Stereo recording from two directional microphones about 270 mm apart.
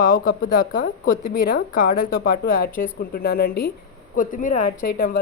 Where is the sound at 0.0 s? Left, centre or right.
Left.